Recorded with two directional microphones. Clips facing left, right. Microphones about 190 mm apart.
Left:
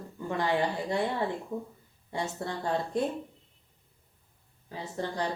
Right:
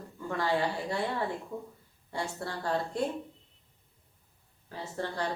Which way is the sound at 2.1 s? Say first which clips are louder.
Left 2 dB; 20° left (ahead or behind).